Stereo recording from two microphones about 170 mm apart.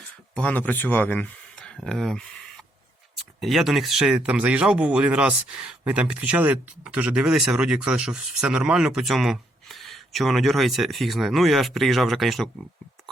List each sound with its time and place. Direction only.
0.3 s speech: 10° left (ahead or behind)
3.4 s speech: centre (ahead or behind)